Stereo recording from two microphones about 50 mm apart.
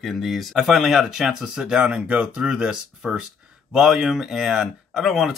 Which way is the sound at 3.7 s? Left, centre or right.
Centre.